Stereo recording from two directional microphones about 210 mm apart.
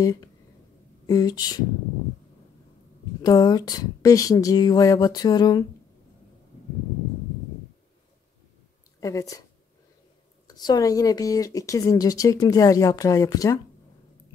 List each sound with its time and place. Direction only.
1.0 s speech: 15° left (ahead or behind)
3.2 s speech: 20° left (ahead or behind)
9.0 s speech: 15° left (ahead or behind)
10.4 s speech: 20° left (ahead or behind)